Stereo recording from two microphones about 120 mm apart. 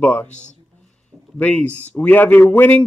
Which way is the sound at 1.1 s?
10° left (ahead or behind).